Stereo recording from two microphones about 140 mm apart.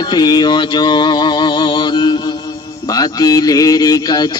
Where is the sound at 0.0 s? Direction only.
30° left (ahead or behind).